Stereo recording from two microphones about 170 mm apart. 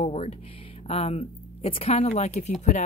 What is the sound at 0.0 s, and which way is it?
Speech, 35° left (ahead or behind).